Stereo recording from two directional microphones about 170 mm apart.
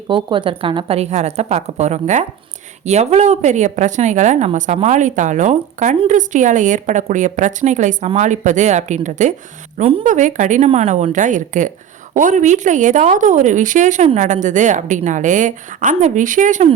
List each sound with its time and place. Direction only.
0.1 s a woman's voice: 30° right (ahead or behind); by 16.6 s 45° right (ahead or behind)